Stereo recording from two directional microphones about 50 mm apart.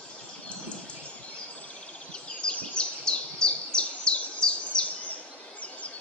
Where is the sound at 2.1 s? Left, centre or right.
Centre.